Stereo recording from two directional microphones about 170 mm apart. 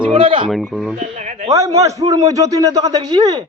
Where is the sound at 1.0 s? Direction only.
40° right (ahead or behind).